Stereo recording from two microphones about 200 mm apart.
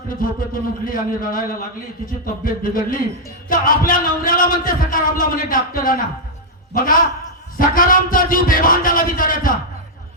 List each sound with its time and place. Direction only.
0.2 s a man's voice: 45° left (ahead or behind)